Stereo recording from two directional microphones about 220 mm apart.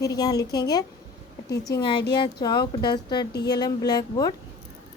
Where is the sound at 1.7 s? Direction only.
20° left (ahead or behind).